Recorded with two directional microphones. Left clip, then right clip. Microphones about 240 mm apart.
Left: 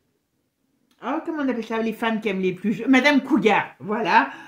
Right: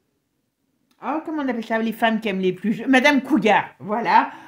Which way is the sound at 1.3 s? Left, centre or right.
Right.